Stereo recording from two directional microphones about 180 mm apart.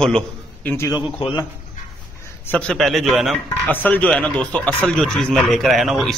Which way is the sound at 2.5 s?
5° left (ahead or behind).